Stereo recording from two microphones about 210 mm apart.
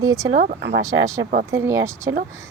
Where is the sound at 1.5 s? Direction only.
15° right (ahead or behind).